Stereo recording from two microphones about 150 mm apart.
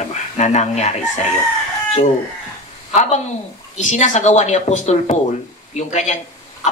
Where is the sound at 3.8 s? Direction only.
55° left (ahead or behind).